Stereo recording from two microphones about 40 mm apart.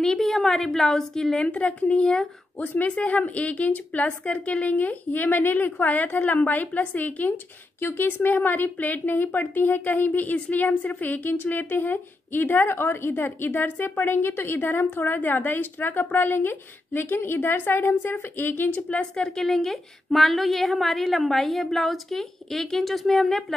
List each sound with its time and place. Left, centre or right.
0.2 s a woman's voice: centre
1.5 s a woman's voice: left
1.9 s a woman's voice: centre
2.6 s a woman's voice: left
7.8 s a woman's voice: left
8.4 s speech: left
11.4 s a woman's voice: left
18.7 s a woman's voice: left
18.9 s a woman's voice: centre
19.4 s a woman's voice: centre